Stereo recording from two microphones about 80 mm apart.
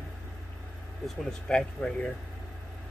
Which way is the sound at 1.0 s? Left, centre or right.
Centre.